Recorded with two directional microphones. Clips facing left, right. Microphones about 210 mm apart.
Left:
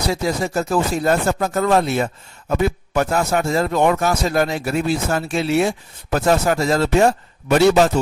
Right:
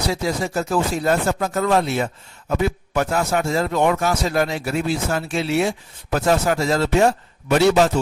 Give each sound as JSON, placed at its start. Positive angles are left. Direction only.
{"t": 0.1, "sound": "a man's voice", "side_deg": 45}